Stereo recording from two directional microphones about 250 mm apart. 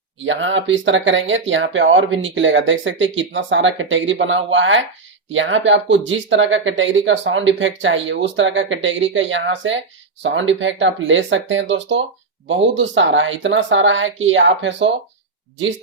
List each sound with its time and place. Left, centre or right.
0.3 s speech: right